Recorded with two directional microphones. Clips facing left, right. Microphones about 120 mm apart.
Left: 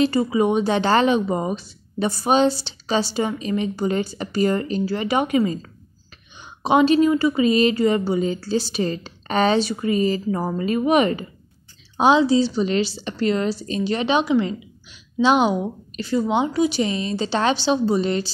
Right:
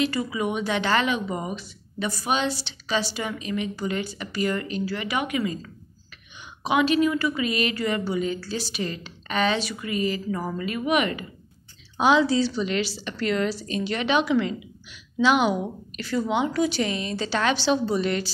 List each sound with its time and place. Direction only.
0.0 s speech: 30° left (ahead or behind)
12.0 s a woman's voice: 25° left (ahead or behind)